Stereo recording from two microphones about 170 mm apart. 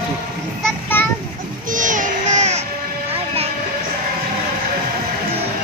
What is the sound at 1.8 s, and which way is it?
Baby cry, 50° right (ahead or behind).